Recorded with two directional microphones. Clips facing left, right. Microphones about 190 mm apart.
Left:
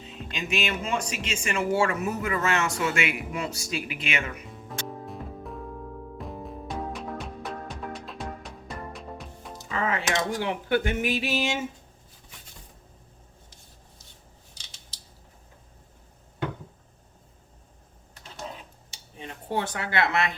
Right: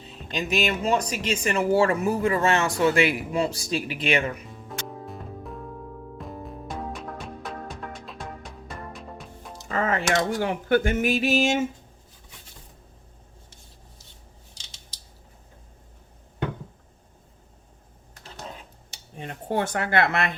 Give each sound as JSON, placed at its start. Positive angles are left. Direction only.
{"t": 0.0, "sound": "speech", "side_deg": -35}
{"t": 4.4, "sound": "music", "side_deg": 0}
{"t": 9.6, "sound": "speech", "side_deg": -45}
{"t": 18.9, "sound": "a sound", "side_deg": -55}